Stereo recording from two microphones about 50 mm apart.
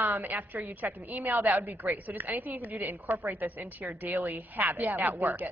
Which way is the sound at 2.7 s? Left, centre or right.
Right.